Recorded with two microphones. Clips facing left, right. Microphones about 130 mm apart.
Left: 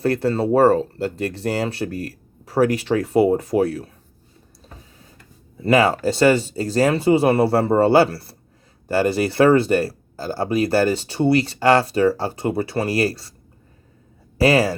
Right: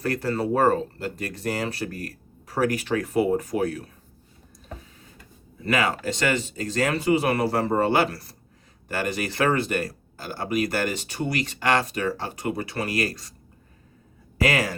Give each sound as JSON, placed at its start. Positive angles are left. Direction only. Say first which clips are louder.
{"t": 0.0, "sound": "speech", "louder": "left 6 dB", "side_deg": 30}
{"t": 5.6, "sound": "speech", "louder": "left 8 dB", "side_deg": 30}
{"t": 14.3, "sound": "speech", "louder": "left 7 dB", "side_deg": 30}